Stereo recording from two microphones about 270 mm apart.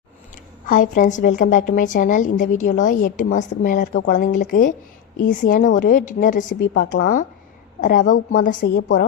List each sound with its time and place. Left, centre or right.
0.7 s a woman's voice: left